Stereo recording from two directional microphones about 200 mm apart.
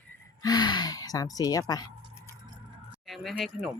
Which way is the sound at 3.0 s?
Centre (ahead or behind).